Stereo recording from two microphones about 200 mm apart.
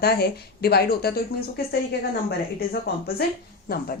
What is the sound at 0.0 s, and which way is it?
A woman's voice, 50° left (ahead or behind).